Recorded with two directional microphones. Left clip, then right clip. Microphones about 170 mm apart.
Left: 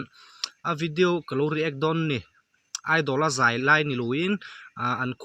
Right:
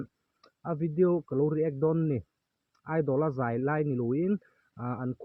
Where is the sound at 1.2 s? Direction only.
50° left (ahead or behind).